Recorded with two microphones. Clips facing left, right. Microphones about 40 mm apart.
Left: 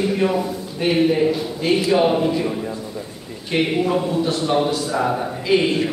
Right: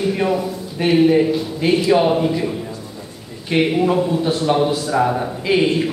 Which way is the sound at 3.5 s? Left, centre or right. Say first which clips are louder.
Right 3 dB; centre.